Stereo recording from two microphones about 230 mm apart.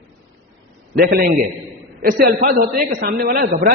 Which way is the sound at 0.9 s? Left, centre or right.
Right.